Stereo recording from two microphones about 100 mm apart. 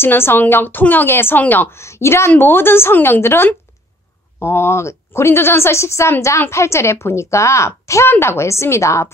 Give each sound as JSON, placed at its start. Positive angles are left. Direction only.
{"t": 0.0, "sound": "a woman's voice", "side_deg": 20}